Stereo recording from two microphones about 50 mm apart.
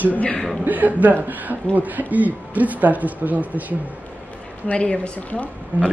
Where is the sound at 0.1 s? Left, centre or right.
Left.